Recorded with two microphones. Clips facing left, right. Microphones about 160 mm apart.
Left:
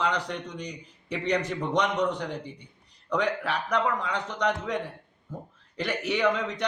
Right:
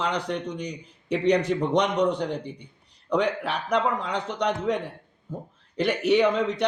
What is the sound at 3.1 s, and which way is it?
A man's voice, 25° right (ahead or behind).